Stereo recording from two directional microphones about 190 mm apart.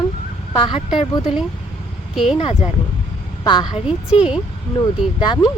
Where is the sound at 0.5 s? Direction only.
25° left (ahead or behind).